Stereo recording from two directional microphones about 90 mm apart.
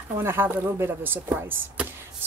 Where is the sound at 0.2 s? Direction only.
25° right (ahead or behind).